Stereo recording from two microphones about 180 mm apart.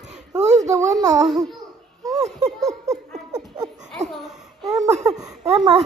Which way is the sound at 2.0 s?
20° right (ahead or behind).